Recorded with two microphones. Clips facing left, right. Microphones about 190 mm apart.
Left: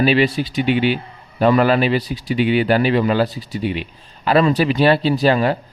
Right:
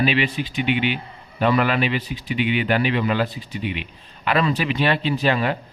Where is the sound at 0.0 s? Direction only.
40° left (ahead or behind).